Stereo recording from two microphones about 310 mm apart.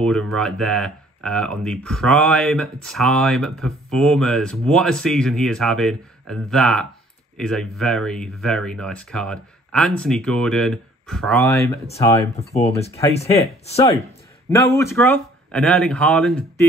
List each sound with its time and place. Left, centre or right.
0.0 s speech: centre
12.4 s speech: left
14.7 s speech: centre